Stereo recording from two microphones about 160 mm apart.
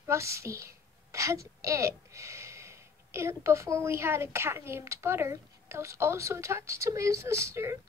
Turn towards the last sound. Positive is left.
turn(degrees=-15)  # may be behind; listen again after turning